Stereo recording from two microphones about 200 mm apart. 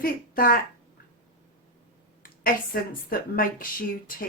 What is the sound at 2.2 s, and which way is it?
A woman's voice, 45° left (ahead or behind).